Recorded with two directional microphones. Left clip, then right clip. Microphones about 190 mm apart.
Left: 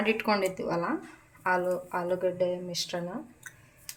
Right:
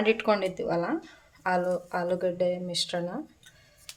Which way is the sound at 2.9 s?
25° right (ahead or behind).